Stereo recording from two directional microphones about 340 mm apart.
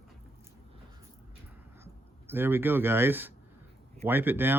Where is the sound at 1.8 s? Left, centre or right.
Centre.